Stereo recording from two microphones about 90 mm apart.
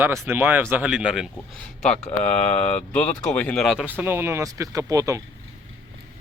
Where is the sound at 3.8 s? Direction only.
20° right (ahead or behind).